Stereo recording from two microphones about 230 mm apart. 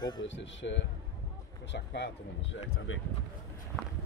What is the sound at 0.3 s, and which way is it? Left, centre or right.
Speech, left.